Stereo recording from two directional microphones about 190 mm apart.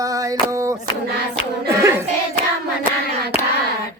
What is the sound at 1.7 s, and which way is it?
Hands, 15° right (ahead or behind).